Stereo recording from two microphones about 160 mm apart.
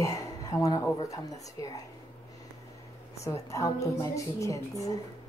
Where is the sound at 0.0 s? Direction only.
20° left (ahead or behind).